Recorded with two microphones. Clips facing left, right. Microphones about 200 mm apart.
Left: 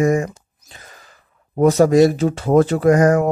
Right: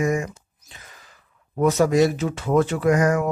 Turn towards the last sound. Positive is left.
turn(degrees=35)  # may be behind; listen again after turning